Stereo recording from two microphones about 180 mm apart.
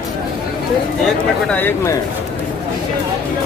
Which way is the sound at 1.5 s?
10° left (ahead or behind).